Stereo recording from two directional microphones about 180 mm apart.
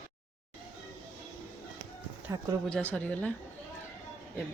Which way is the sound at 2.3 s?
15° right (ahead or behind).